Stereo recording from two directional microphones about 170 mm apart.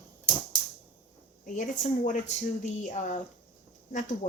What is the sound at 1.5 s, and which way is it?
Speech, 45° left (ahead or behind).